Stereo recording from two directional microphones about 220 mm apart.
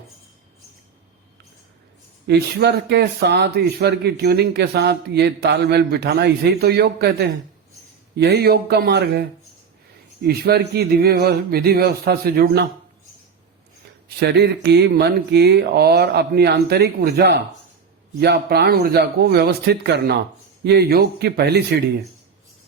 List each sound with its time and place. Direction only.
2.2 s speech: 50° right (ahead or behind)
10.2 s speech: 45° right (ahead or behind)
14.2 s speech: 50° right (ahead or behind)